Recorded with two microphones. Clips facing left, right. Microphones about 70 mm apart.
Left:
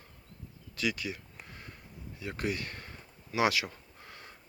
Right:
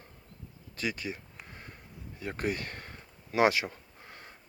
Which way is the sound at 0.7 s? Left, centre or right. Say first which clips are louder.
Left 1 dB; right.